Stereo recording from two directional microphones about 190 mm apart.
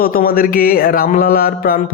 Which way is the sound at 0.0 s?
50° left (ahead or behind).